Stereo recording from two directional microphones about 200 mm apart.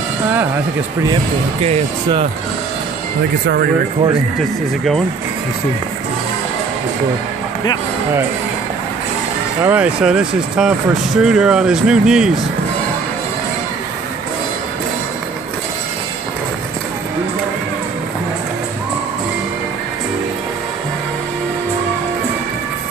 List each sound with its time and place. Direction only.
1.6 s speech: 30° right (ahead or behind)
9.6 s speech: 10° right (ahead or behind)